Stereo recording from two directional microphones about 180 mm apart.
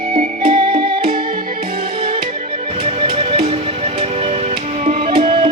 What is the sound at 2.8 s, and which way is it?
Music, 30° right (ahead or behind).